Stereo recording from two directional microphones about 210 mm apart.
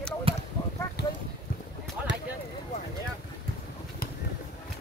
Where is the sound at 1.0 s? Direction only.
50° left (ahead or behind).